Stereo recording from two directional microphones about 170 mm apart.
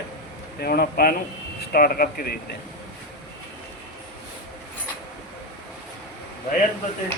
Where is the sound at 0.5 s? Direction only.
65° left (ahead or behind).